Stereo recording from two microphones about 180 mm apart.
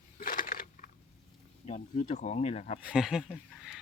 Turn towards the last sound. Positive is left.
turn(degrees=0)  # may be behind; listen again after turning